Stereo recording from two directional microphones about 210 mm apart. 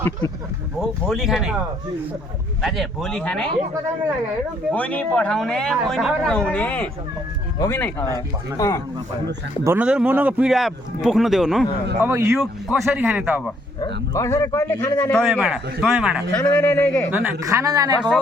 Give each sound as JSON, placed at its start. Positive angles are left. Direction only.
{"t": 0.8, "sound": "a man's voice", "side_deg": 0}
{"t": 2.6, "sound": "a man's voice", "side_deg": 0}
{"t": 4.7, "sound": "a man's voice", "side_deg": 5}
{"t": 9.6, "sound": "a man's voice", "side_deg": -5}
{"t": 11.9, "sound": "speech", "side_deg": -15}
{"t": 12.4, "sound": "a man's voice", "side_deg": 0}
{"t": 13.8, "sound": "a man's voice", "side_deg": 15}
{"t": 16.3, "sound": "speech", "side_deg": 5}
{"t": 17.1, "sound": "speech", "side_deg": -10}